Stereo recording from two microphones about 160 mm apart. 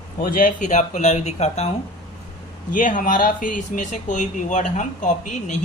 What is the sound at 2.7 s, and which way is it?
Speech, 55° left (ahead or behind).